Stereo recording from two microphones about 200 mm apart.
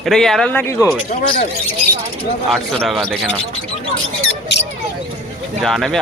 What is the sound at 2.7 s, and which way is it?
Speech, centre (ahead or behind).